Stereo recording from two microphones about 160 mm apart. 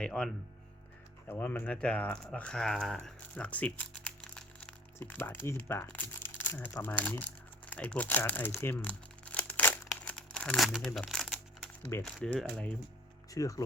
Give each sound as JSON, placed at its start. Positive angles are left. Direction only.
{"t": 0.0, "sound": "speech", "side_deg": 5}
{"t": 1.3, "sound": "speech", "side_deg": 10}
{"t": 7.7, "sound": "crumpling", "side_deg": 10}
{"t": 11.9, "sound": "speech", "side_deg": 10}
{"t": 13.3, "sound": "speech", "side_deg": 20}